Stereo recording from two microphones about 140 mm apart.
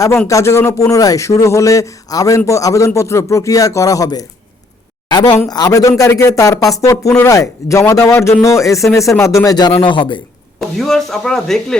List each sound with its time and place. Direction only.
0.3 s a woman's voice: 20° left (ahead or behind)
10.6 s speech: centre (ahead or behind)